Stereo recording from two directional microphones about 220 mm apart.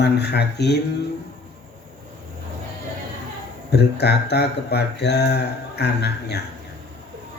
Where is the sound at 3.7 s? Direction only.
50° left (ahead or behind).